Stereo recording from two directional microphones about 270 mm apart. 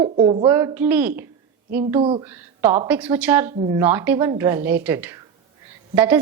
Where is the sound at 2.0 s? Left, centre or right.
Centre.